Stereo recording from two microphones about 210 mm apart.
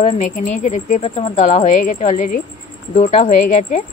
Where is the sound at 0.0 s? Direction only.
35° left (ahead or behind).